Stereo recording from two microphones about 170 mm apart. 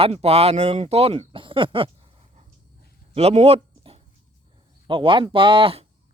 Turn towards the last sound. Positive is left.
turn(degrees=-35)  # may be behind; listen again after turning